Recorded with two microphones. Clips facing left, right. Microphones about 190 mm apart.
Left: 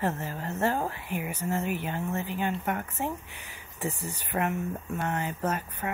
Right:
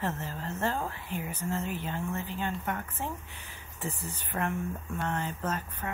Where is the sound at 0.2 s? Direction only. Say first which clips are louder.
Left 4 dB; 10° left (ahead or behind).